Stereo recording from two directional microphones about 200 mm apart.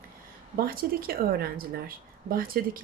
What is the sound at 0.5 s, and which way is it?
Speech, 50° right (ahead or behind).